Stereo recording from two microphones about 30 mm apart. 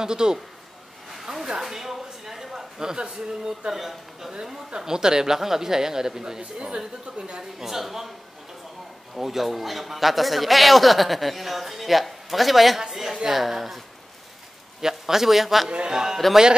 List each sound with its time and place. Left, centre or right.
0.0 s speech: right
1.1 s a sound: centre
3.0 s speech: right
3.7 s a woman's voice: centre
4.6 s speech: right
7.5 s a woman's voice: centre
9.1 s a man's voice: centre
14.8 s a woman's voice: centre
15.9 s a woman's voice: centre